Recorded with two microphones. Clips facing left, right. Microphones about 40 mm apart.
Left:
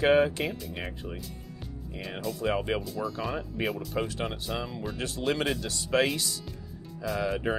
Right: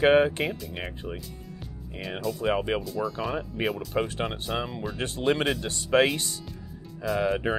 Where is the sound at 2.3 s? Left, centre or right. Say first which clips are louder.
Right 2 dB; centre.